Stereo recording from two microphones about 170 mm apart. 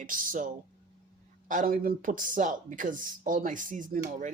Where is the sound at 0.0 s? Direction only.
55° right (ahead or behind).